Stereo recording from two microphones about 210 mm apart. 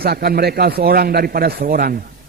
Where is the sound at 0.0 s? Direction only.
50° right (ahead or behind).